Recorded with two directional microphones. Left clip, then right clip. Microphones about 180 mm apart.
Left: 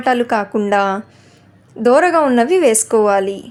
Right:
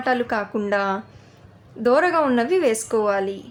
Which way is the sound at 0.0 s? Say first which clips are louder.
Left 7 dB; 30° left (ahead or behind).